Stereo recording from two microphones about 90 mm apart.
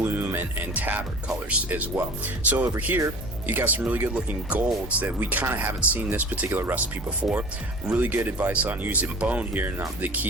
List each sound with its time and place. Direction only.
0.0 s speech: 25° right (ahead or behind)